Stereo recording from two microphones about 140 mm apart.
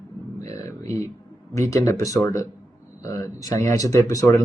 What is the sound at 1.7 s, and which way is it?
Speech, 25° left (ahead or behind).